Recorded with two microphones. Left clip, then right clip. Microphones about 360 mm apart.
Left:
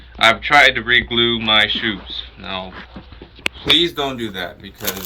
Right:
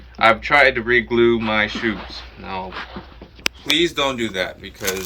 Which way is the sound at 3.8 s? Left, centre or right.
Centre.